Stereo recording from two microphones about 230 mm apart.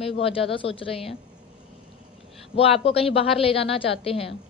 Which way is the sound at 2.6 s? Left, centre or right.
Left.